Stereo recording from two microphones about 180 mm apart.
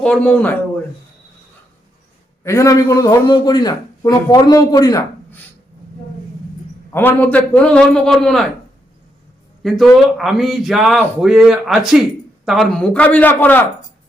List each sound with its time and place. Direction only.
0.0 s a man's voice: 5° left (ahead or behind)
2.4 s a man's voice: 15° left (ahead or behind)
6.9 s speech: 10° left (ahead or behind)
9.6 s speech: centre (ahead or behind)
12.8 s a man's voice: 5° left (ahead or behind)